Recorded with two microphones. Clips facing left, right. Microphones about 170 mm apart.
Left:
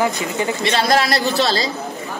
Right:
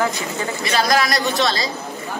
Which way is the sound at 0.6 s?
30° left (ahead or behind).